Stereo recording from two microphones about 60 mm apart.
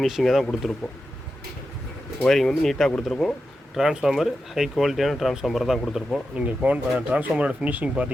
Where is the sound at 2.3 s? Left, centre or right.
Centre.